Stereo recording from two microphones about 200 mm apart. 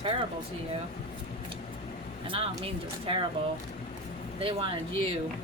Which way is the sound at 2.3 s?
25° right (ahead or behind).